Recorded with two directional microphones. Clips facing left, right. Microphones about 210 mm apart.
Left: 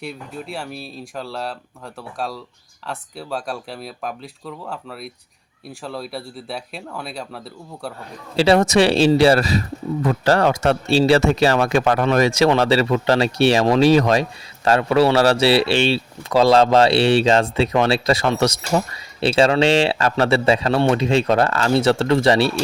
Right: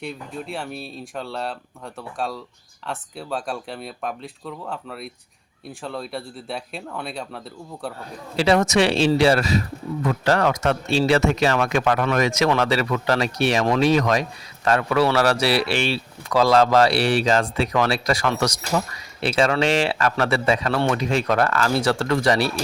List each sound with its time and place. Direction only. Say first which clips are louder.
0.0 s speech: even; centre (ahead or behind)
8.4 s a man's voice: left 3 dB; 30° left (ahead or behind)